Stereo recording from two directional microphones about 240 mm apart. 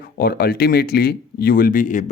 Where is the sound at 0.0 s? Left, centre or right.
Left.